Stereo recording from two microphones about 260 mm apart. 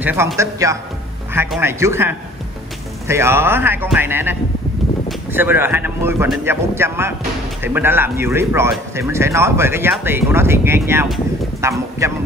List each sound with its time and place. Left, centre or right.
0.0 s speech: centre